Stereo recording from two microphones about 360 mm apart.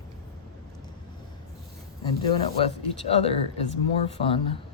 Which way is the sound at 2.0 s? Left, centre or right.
Centre.